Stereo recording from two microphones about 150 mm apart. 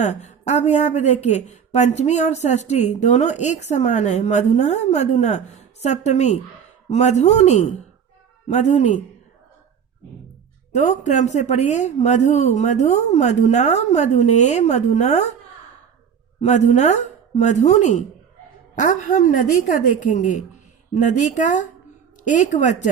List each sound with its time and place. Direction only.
0.0 s speech: 50° left (ahead or behind)
10.8 s speech: 50° left (ahead or behind)
16.4 s a woman's voice: 50° left (ahead or behind)